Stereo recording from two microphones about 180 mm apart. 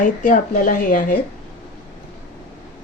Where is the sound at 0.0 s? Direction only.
45° left (ahead or behind).